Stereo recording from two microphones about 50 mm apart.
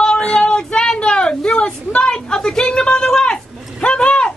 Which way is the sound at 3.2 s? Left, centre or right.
Centre.